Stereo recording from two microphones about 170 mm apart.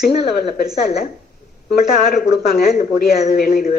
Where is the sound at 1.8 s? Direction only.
55° left (ahead or behind).